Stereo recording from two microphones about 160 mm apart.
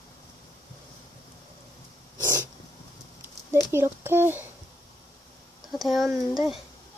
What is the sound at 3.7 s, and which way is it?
Speech, 15° right (ahead or behind).